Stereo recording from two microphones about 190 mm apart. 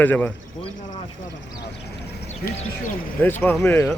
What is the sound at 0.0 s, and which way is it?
Speech, 10° left (ahead or behind).